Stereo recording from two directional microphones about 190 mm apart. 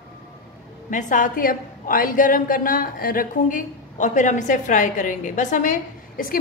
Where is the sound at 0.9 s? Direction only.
40° left (ahead or behind).